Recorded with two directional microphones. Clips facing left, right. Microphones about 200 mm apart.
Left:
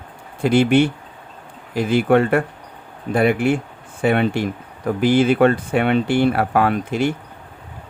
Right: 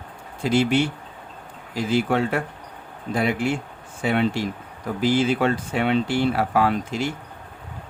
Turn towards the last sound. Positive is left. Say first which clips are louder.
# left 4 dB
turn(degrees=60)  # may be behind; listen again after turning